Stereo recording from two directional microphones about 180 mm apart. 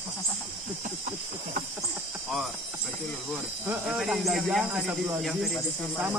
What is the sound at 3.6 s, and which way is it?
Speech, centre (ahead or behind).